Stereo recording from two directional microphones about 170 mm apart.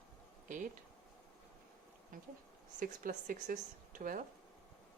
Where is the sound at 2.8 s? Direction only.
55° right (ahead or behind).